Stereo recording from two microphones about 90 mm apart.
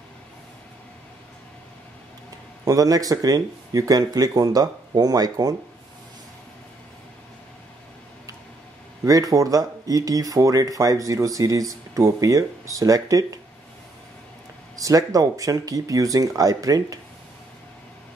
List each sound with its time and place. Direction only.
2.6 s speech: 45° right (ahead or behind)
9.0 s speech: 40° right (ahead or behind)
14.8 s speech: 40° right (ahead or behind)